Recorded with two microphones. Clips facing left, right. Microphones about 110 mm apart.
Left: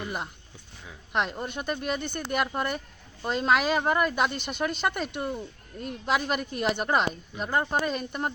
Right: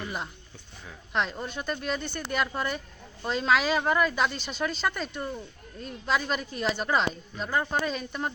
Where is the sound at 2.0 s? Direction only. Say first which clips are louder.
Left 2 dB; 50° left (ahead or behind).